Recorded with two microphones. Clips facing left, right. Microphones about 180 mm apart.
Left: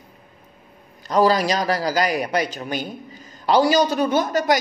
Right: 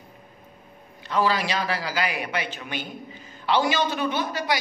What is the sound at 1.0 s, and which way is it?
A man's voice, 40° left (ahead or behind).